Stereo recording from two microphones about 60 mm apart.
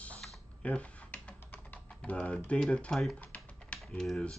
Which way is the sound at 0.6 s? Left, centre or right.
Left.